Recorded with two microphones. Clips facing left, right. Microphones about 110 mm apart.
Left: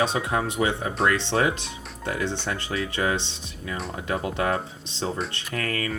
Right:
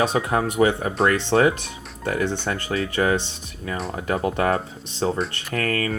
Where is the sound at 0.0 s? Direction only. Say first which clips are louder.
Right 3 dB; 50° right (ahead or behind).